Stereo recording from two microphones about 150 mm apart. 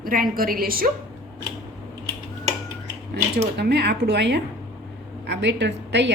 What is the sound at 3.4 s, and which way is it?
A woman's voice, 90° right.